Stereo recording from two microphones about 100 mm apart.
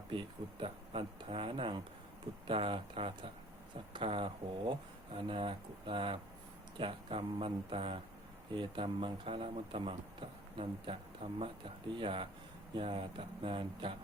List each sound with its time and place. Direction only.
0.6 s a man's voice: 60° right (ahead or behind)